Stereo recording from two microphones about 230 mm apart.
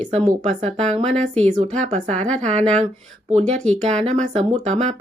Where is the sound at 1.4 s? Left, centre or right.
Right.